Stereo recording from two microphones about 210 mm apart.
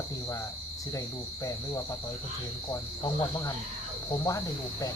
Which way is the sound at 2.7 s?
15° left (ahead or behind).